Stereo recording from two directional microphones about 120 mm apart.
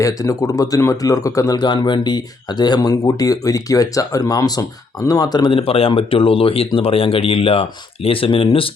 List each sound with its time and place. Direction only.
0.0 s speech: 30° left (ahead or behind); by 8.7 s 50° left (ahead or behind)